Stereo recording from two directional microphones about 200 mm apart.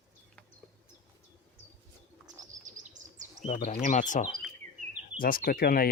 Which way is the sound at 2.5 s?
40° right (ahead or behind).